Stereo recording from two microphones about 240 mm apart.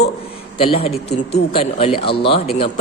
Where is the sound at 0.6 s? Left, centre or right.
Left.